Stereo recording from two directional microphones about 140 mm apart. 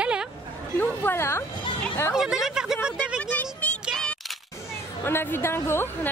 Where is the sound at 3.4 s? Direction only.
10° left (ahead or behind).